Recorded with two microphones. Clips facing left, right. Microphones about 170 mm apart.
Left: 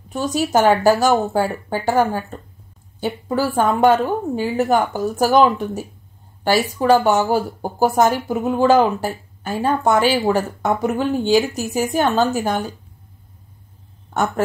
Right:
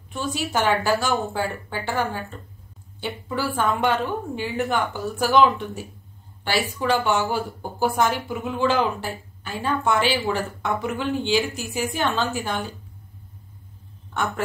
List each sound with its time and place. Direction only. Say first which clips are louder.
0.1 s a woman's voice: left 7 dB; 40° left (ahead or behind)